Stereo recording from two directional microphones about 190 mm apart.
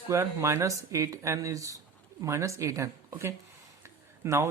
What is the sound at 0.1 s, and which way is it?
Speech, 15° right (ahead or behind).